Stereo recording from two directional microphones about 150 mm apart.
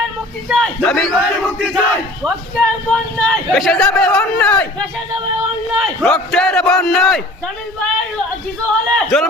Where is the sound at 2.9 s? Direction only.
5° left (ahead or behind).